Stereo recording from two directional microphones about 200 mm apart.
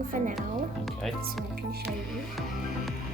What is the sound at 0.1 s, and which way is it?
Speech, 40° right (ahead or behind).